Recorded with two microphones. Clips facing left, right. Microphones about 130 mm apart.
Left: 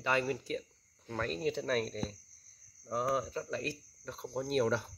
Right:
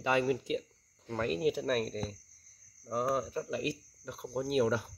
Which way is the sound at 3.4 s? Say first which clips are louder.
Right 3 dB; 15° right (ahead or behind).